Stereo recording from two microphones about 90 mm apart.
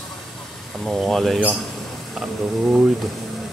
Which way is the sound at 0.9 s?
5° left (ahead or behind).